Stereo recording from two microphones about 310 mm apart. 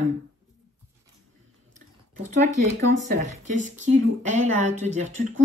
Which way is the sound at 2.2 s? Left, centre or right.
Right.